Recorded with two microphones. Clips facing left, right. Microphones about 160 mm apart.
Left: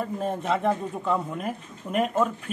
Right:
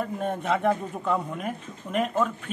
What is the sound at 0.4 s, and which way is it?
Speech, centre (ahead or behind).